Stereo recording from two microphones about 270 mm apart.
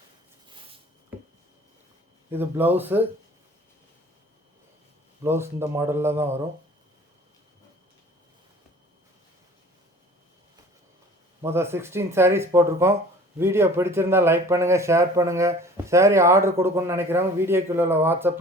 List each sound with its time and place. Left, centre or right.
0.4 s a sound: centre
2.3 s speech: centre
5.2 s speech: centre
11.4 s speech: centre